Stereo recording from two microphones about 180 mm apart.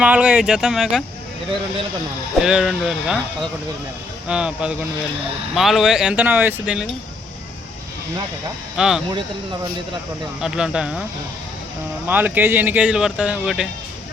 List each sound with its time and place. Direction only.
0.0 s speech: 5° right (ahead or behind)
2.4 s speech: 5° right (ahead or behind)
4.3 s speech: 5° right (ahead or behind)
8.7 s speech: 5° right (ahead or behind)
10.4 s speech: 5° right (ahead or behind)
12.0 s speech: 10° right (ahead or behind)